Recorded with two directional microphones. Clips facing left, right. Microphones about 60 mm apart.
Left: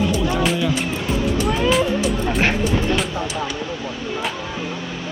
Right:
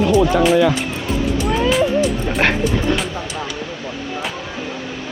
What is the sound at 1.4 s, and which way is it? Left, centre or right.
Music, centre.